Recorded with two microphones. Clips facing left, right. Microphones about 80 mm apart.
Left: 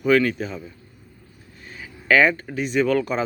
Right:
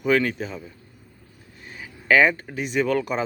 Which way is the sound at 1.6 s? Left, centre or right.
Centre.